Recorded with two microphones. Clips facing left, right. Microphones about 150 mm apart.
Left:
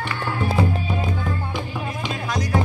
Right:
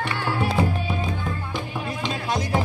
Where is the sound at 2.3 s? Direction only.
25° right (ahead or behind).